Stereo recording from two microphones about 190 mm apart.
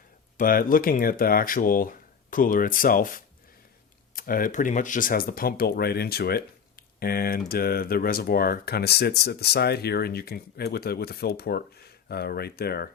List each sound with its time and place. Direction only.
0.3 s speech: 50° left (ahead or behind)